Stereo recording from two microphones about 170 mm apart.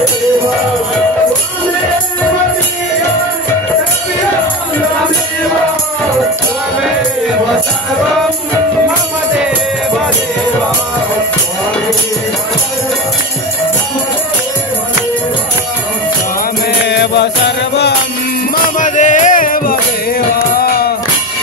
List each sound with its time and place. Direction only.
16.8 s music: 90° left
18.8 s music: 45° left (ahead or behind)